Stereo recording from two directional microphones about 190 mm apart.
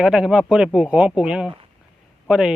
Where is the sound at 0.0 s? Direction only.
5° right (ahead or behind).